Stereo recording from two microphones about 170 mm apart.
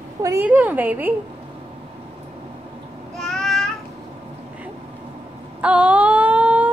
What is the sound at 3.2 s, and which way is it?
Child singing, centre (ahead or behind).